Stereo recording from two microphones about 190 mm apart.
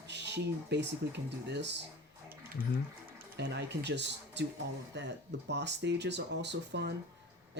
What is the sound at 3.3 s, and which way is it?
Speech, 60° right (ahead or behind).